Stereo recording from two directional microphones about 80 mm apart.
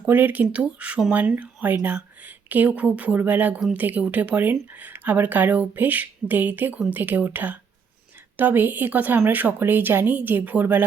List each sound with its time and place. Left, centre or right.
0.1 s speech: right